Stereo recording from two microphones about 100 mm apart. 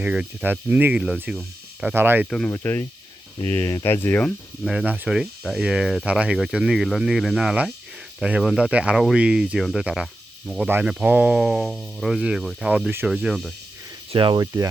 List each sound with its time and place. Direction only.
0.0 s speech: 10° right (ahead or behind)
2.0 s speech: 20° right (ahead or behind)
2.5 s speech: 25° left (ahead or behind)
4.6 s speech: 5° right (ahead or behind)
10.7 s speech: 15° right (ahead or behind)
14.1 s speech: 55° right (ahead or behind)
14.3 s speech: 35° right (ahead or behind)